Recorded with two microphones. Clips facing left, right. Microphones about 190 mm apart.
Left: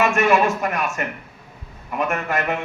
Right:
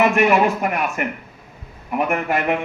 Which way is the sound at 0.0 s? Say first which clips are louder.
Right 2 dB; 15° right (ahead or behind).